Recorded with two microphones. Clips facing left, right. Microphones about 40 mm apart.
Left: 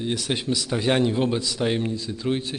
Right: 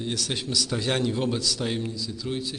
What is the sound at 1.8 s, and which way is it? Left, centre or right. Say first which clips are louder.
Speech: left 5 dB; left.